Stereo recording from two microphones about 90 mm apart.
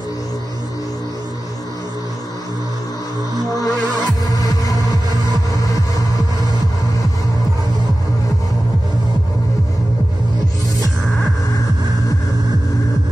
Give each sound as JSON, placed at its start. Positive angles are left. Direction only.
{"t": 3.6, "sound": "music", "side_deg": 45}